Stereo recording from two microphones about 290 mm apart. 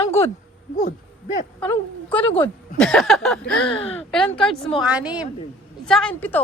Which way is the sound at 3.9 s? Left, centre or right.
Centre.